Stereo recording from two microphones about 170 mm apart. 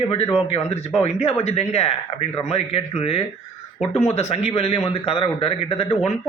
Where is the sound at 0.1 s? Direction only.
35° left (ahead or behind).